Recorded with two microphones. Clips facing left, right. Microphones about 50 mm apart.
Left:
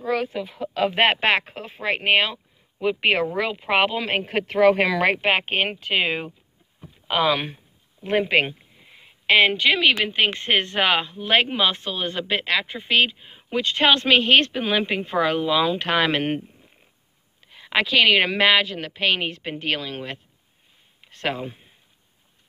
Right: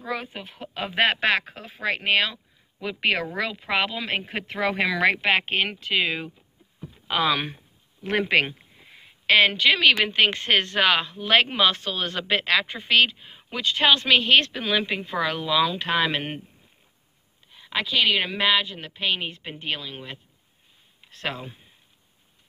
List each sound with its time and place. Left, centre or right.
0.9 s speech: left
3.7 s a woman's voice: left
7.1 s speech: centre
8.0 s a sound: centre
9.2 s speech: left
9.7 s speech: centre
10.3 s speech: left
13.5 s a woman's voice: left
15.8 s speech: left
17.6 s a woman's voice: left
18.9 s a woman's voice: left
21.3 s a woman's voice: left